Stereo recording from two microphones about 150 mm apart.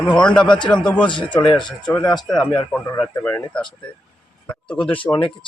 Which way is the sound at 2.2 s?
Centre (ahead or behind).